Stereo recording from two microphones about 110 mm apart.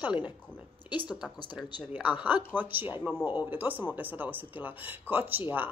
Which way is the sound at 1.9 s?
15° right (ahead or behind).